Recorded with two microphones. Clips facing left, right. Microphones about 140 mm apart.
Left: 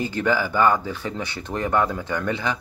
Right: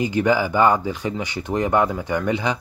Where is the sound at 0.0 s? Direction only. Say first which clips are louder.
Right 4 dB; 15° right (ahead or behind).